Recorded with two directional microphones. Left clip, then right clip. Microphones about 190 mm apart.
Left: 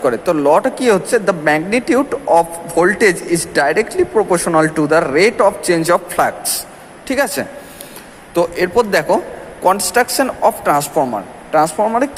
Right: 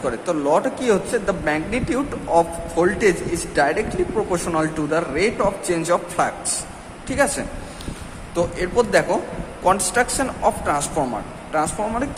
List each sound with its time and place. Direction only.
0.0 s speech: 35° left (ahead or behind)